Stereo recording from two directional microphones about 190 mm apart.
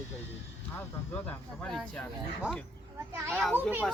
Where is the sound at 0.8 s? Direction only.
10° left (ahead or behind).